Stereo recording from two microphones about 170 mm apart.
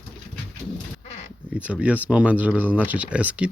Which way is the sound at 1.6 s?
10° right (ahead or behind).